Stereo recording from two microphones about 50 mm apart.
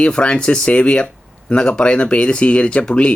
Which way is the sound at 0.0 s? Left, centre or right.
Left.